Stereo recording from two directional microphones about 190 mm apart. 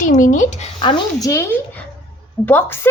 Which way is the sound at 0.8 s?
20° left (ahead or behind).